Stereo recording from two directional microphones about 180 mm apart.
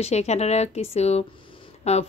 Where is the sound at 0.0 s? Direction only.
40° left (ahead or behind).